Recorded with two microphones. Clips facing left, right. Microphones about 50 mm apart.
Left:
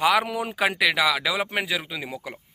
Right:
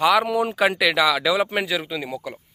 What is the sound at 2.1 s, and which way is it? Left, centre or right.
Speech, left.